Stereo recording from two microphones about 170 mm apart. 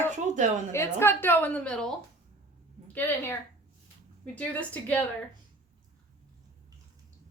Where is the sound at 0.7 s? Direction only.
15° left (ahead or behind).